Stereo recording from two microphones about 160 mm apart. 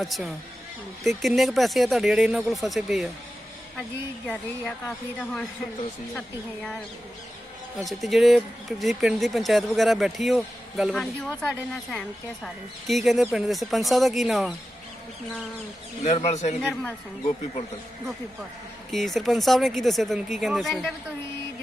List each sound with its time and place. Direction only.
0.0 s speech: centre (ahead or behind)
4.3 s speech: 5° left (ahead or behind)
7.9 s speech: centre (ahead or behind)
16.0 s speech: 45° left (ahead or behind)
16.6 s speech: 5° left (ahead or behind)
18.9 s speech: centre (ahead or behind)